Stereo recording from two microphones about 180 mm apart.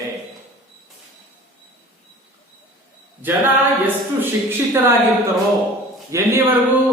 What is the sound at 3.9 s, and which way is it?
Speech, 10° right (ahead or behind).